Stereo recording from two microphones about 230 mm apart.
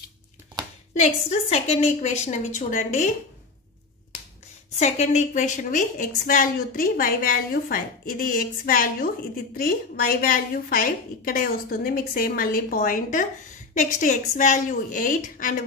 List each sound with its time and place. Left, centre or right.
0.9 s a woman's voice: left
4.7 s a woman's voice: left